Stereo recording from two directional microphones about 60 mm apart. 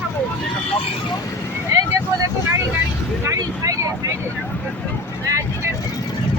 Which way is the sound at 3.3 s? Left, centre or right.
Right.